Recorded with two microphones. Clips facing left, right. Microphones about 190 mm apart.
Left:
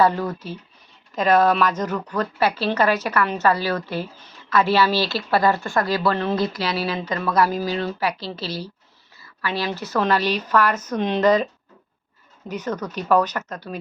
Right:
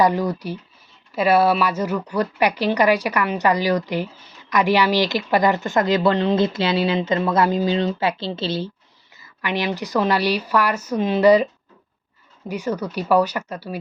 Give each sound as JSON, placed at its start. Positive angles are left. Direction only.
{"t": 0.0, "sound": "a woman's voice", "side_deg": -15}
{"t": 12.5, "sound": "a woman's voice", "side_deg": -10}